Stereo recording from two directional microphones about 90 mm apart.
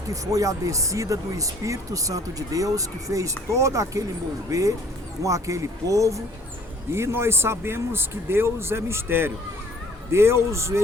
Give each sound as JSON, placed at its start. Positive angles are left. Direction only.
{"t": 0.1, "sound": "speech", "side_deg": -40}